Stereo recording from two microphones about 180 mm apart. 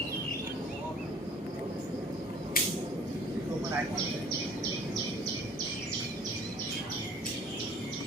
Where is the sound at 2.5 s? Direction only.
55° left (ahead or behind).